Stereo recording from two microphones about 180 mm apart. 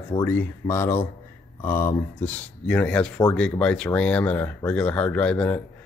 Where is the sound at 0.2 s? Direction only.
10° left (ahead or behind).